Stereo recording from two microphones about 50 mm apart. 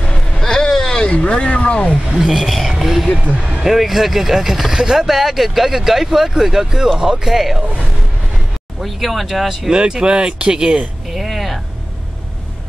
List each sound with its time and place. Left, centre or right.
0.0 s vehicle: left
0.4 s vehicle: centre
1.0 s speech: left
2.1 s speech: centre
8.7 s speech: centre
9.7 s speech: centre
11.1 s a sound: centre